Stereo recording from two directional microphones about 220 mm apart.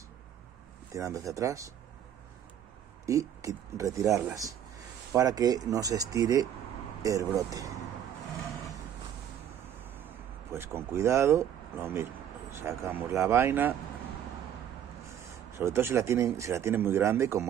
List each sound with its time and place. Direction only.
0.9 s speech: 15° right (ahead or behind)
3.1 s speech: 15° right (ahead or behind)
9.8 s a sound: 10° right (ahead or behind)
12.5 s speech: 10° right (ahead or behind)
15.5 s speech: 10° right (ahead or behind)